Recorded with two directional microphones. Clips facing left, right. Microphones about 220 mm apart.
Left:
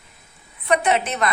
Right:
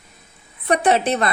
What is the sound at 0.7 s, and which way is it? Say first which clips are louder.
Speech: right 3 dB; 35° right (ahead or behind).